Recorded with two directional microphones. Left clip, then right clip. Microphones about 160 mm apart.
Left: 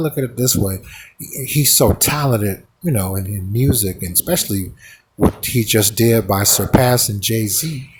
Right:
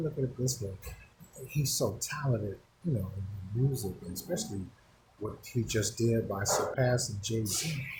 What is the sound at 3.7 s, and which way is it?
Speech, 70° left (ahead or behind).